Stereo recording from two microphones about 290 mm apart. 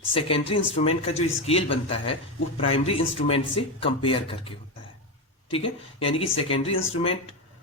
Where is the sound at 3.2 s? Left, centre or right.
Centre.